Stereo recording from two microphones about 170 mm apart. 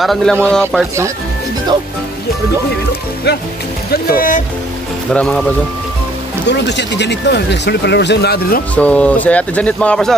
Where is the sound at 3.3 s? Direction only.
85° left.